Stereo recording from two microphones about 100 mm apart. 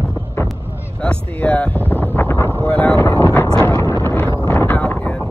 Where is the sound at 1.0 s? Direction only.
15° left (ahead or behind).